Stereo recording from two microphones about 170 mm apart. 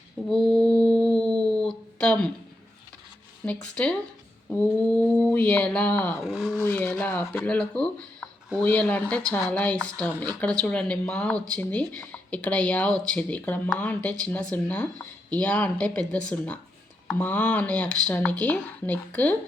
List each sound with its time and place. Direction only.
0.3 s mantra: 5° left (ahead or behind)
2.0 s speech: 5° left (ahead or behind)
3.4 s speech: 5° left (ahead or behind)